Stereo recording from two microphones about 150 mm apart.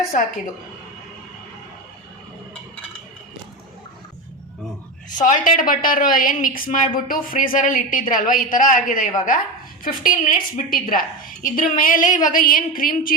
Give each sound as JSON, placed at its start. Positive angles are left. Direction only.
{"t": 5.0, "sound": "a woman's voice", "side_deg": 55}